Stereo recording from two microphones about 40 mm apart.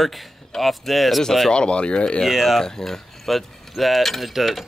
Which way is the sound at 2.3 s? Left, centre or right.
Centre.